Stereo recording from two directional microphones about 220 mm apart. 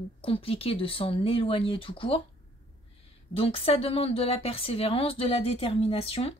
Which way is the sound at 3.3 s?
25° left (ahead or behind).